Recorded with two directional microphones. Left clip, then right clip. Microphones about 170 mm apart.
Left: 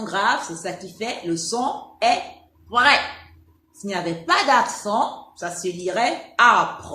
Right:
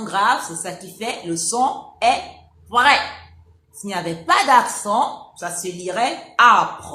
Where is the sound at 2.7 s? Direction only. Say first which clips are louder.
Right 2 dB; 15° right (ahead or behind).